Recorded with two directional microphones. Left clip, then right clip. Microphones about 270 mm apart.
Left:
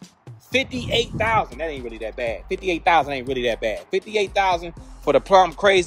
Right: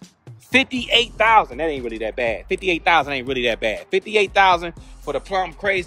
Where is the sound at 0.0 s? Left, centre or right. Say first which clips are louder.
Even; centre.